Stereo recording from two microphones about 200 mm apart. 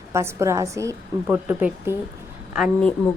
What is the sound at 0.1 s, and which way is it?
A woman's voice, 15° right (ahead or behind).